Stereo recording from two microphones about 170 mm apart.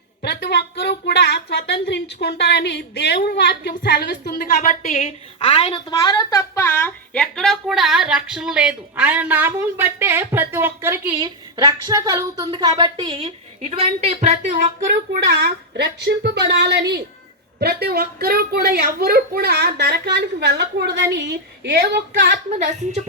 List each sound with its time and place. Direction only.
0.2 s a woman's voice: 80° left
4.7 s a woman's voice: 50° left (ahead or behind)
5.4 s a woman's voice: 35° left (ahead or behind)
6.0 s a woman's voice: 20° left (ahead or behind); by 11.1 s 15° right (ahead or behind)
11.2 s a woman's voice: 25° right (ahead or behind); by 14.7 s 40° right (ahead or behind)
15.3 s a woman's voice: 70° right (ahead or behind)
22.5 s a woman's voice: 40° right (ahead or behind)